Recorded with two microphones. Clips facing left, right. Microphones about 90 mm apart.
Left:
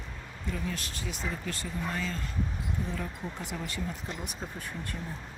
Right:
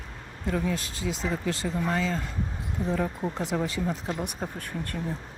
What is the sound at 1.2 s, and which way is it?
Speech, 90° right.